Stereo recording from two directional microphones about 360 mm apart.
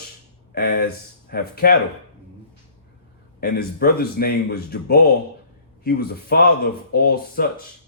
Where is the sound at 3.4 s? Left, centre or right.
Left.